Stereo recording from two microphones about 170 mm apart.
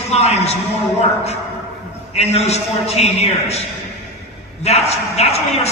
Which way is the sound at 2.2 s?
40° left (ahead or behind).